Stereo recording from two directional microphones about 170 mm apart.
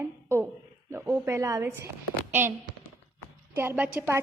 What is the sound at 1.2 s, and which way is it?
A woman's voice, 20° right (ahead or behind).